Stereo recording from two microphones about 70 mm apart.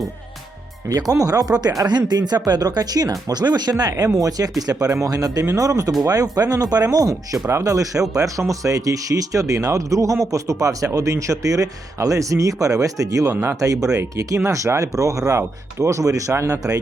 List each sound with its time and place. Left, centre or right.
0.9 s speech: right
1.9 s speech: right
3.9 s speech: right
7.4 s speech: right